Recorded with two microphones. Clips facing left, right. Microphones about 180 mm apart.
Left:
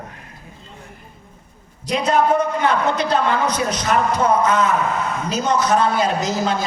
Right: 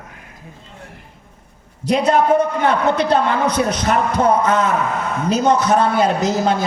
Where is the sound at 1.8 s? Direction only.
60° right (ahead or behind).